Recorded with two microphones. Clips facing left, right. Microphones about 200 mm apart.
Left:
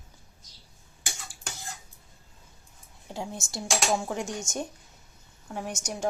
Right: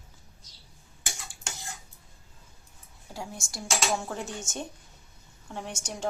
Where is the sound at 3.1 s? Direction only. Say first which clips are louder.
Left 4 dB; 20° left (ahead or behind).